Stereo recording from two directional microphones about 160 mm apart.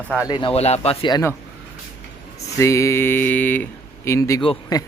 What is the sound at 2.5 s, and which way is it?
A man's voice, 20° left (ahead or behind).